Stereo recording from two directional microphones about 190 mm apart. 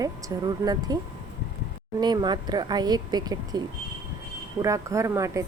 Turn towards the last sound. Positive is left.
turn(degrees=-15)  # may be behind; listen again after turning